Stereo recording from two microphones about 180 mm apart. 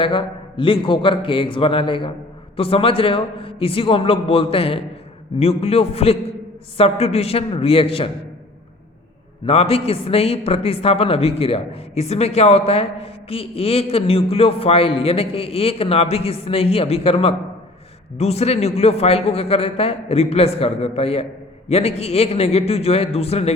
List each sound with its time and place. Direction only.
0.0 s a man's voice: 30° left (ahead or behind)
9.5 s a man's voice: 35° left (ahead or behind)